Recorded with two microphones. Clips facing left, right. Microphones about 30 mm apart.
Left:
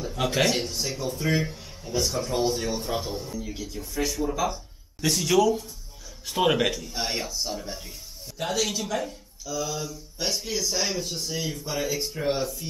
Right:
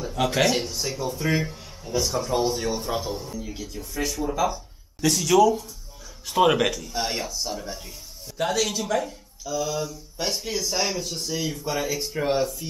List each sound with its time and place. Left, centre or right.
0.0 s speech: centre